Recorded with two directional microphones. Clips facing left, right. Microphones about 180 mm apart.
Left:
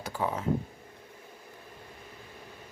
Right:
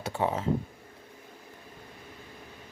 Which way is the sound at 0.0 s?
25° right (ahead or behind).